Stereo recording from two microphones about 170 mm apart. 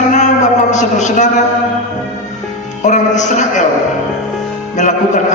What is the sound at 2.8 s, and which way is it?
Speech, 45° left (ahead or behind).